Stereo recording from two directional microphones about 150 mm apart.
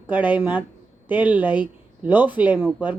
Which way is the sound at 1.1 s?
10° right (ahead or behind).